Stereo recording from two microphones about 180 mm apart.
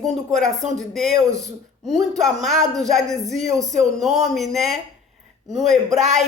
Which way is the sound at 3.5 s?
20° right (ahead or behind).